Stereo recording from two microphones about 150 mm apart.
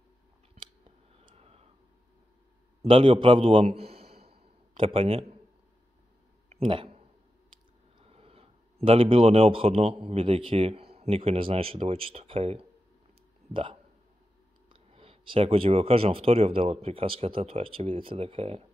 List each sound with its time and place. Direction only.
1.1 s clicking: 45° right (ahead or behind)
2.8 s a man's voice: 35° right (ahead or behind)
6.5 s a sound: 40° right (ahead or behind)
8.0 s speech: 40° right (ahead or behind)